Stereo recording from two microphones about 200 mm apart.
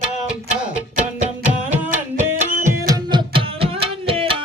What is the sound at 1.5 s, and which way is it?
Music, 10° right (ahead or behind).